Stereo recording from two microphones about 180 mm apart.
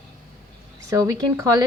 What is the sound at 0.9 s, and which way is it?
Speech, 20° right (ahead or behind).